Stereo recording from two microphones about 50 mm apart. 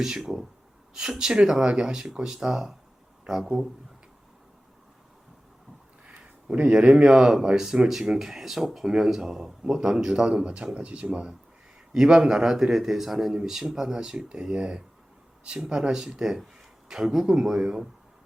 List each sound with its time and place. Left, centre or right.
0.2 s speech: centre
6.6 s speech: right
11.9 s speech: centre